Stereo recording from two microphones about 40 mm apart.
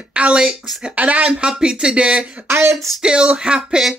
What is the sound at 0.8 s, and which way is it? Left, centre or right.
Speech, right.